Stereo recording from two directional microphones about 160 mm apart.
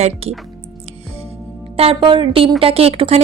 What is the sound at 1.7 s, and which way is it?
A woman's voice, 35° right (ahead or behind).